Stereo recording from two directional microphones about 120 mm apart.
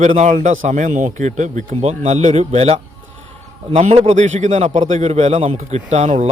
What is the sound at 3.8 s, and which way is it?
A man's voice, 70° right (ahead or behind).